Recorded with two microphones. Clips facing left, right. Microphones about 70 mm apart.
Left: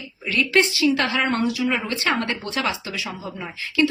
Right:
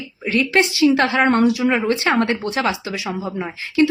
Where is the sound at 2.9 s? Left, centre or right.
Right.